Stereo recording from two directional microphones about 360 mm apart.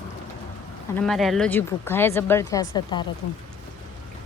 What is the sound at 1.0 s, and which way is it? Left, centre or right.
Speech, centre.